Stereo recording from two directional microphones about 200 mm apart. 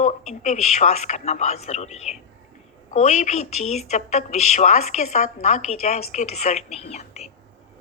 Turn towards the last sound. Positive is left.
turn(degrees=30)  # may be behind; listen again after turning